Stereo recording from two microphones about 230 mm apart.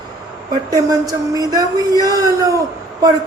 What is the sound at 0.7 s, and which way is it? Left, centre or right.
Speech, centre.